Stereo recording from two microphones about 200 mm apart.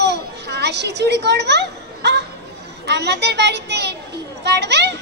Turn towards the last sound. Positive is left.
turn(degrees=-60)  # may be behind; listen again after turning